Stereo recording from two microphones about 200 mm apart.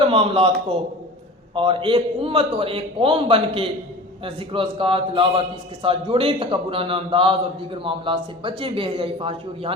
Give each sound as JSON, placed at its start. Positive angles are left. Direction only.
{"t": 0.0, "sound": "a man's voice", "side_deg": -25}
{"t": 1.5, "sound": "a man's voice", "side_deg": -25}